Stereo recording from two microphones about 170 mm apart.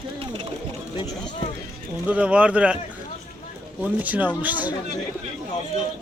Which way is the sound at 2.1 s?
5° right (ahead or behind).